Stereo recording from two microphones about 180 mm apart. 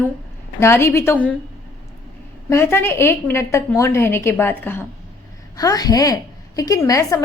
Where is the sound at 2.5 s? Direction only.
15° left (ahead or behind).